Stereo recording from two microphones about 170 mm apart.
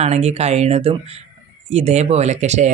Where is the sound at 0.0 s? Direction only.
40° right (ahead or behind).